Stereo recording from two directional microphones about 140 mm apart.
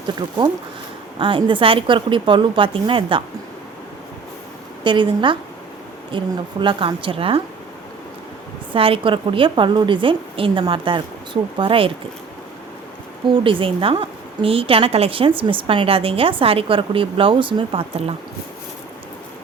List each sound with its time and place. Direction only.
1.2 s a woman's voice: 35° right (ahead or behind)
4.8 s a woman's voice: 35° right (ahead or behind)
8.7 s a woman's voice: 40° right (ahead or behind)
13.2 s a woman's voice: 35° right (ahead or behind)